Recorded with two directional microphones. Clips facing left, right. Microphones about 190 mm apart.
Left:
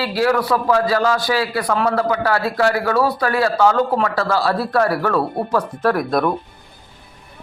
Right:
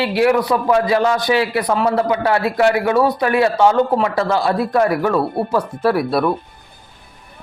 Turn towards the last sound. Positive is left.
turn(degrees=-5)  # may be behind; listen again after turning